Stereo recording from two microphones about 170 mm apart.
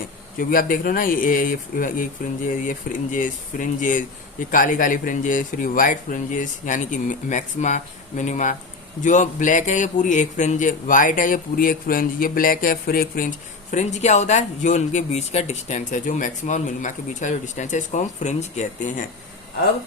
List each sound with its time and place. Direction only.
0.3 s speech: 55° left (ahead or behind)